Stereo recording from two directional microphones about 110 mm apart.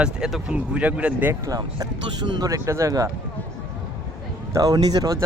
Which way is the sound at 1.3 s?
35° right (ahead or behind).